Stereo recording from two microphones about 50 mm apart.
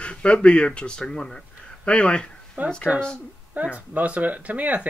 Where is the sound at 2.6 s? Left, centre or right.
Right.